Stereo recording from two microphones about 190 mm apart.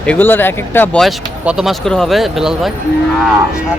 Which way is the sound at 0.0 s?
10° left (ahead or behind).